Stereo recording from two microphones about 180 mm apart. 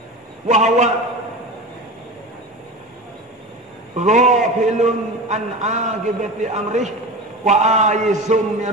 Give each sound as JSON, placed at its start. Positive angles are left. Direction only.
{"t": 0.5, "sound": "a man's voice", "side_deg": -40}
{"t": 3.9, "sound": "a man's voice", "side_deg": -40}